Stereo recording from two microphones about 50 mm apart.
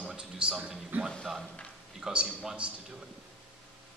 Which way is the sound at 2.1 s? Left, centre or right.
Right.